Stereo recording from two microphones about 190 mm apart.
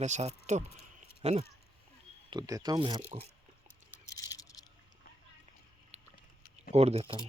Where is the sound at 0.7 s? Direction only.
55° left (ahead or behind).